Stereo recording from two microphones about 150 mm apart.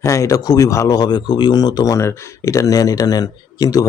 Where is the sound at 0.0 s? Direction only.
20° left (ahead or behind).